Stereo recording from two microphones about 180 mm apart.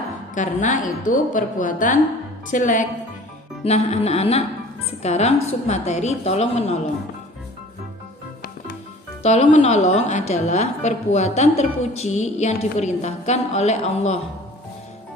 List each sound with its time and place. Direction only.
0.3 s a woman's voice: 45° left (ahead or behind)
3.6 s a woman's voice: 35° left (ahead or behind)
9.2 s a woman's voice: 40° left (ahead or behind)